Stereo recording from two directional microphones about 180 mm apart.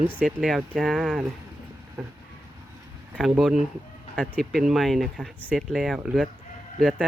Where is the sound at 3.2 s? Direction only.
Centre (ahead or behind).